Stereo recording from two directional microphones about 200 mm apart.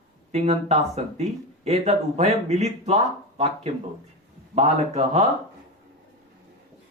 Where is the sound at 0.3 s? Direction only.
30° right (ahead or behind).